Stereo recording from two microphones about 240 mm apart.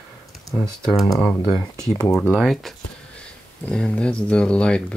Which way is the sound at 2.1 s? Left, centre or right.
Centre.